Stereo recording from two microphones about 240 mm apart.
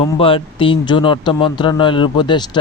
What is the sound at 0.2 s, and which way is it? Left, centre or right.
Speech, left.